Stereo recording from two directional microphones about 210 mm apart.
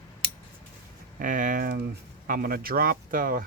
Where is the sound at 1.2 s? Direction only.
40° right (ahead or behind).